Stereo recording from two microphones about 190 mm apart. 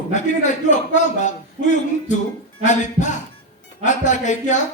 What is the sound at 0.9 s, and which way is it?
Music, 40° left (ahead or behind).